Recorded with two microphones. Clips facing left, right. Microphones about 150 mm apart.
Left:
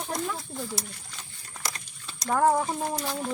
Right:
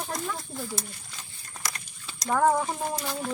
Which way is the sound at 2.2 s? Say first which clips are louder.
Even; 5° left (ahead or behind).